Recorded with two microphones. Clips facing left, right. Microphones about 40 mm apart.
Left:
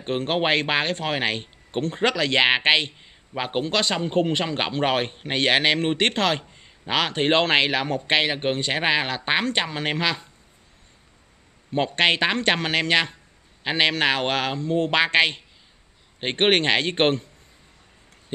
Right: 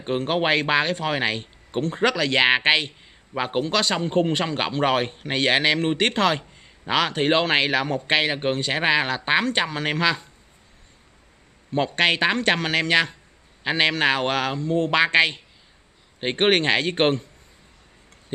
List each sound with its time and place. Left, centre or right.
0.3 s speech: centre
0.6 s speech: left
1.8 s speech: centre
2.6 s speech: left
3.9 s a man's voice: centre
4.8 s speech: left
7.2 s a man's voice: centre
7.5 s speech: left
8.3 s a man's voice: centre
8.7 s speech: left
9.8 s speech: left
11.9 s speech: left